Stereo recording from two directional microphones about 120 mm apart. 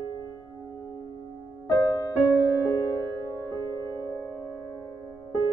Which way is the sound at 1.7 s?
30° left (ahead or behind).